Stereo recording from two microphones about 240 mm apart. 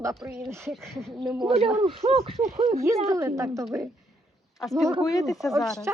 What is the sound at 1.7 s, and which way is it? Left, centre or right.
Speech, right.